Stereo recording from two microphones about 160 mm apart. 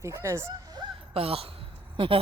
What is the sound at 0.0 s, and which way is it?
Speech, 15° right (ahead or behind).